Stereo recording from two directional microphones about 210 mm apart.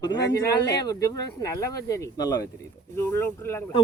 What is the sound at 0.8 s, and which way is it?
Speech, 15° left (ahead or behind).